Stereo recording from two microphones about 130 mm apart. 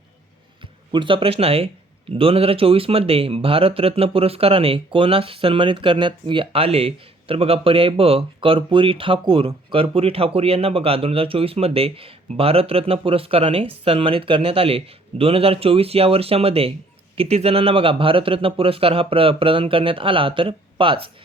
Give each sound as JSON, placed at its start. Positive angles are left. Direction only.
{"t": 0.6, "sound": "speech", "side_deg": -40}